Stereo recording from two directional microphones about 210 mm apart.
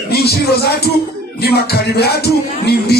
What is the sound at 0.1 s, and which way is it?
Music, 50° left (ahead or behind).